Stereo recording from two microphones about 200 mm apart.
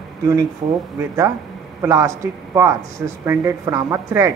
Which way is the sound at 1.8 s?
15° right (ahead or behind).